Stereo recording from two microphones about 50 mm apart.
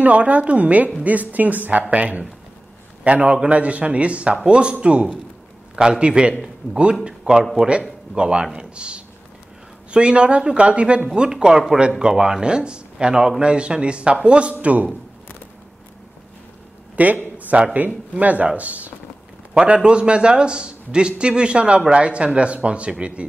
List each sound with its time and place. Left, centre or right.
0.0 s a man's voice: right
16.9 s a sound: right
17.7 s a man's voice: right